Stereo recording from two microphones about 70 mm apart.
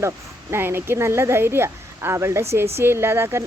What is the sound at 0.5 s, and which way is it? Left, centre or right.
A woman's voice, right.